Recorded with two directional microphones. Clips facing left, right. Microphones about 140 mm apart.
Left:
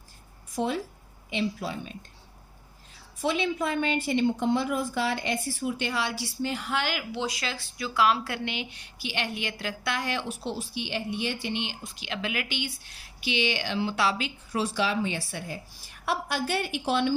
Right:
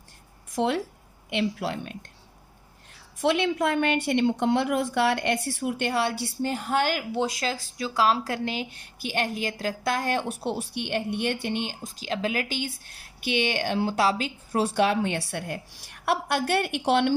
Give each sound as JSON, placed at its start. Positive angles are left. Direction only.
{"t": 0.5, "sound": "a woman's voice", "side_deg": -80}
{"t": 3.2, "sound": "a woman's voice", "side_deg": -75}